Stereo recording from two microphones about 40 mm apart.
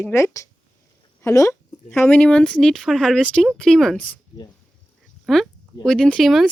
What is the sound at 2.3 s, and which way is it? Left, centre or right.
A woman's voice, left.